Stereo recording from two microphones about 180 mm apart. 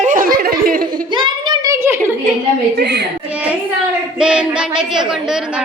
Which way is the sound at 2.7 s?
70° right (ahead or behind).